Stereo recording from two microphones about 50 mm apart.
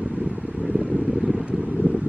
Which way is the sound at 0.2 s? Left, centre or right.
Centre.